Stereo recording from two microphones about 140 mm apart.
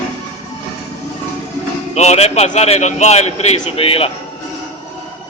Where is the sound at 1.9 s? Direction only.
50° left (ahead or behind).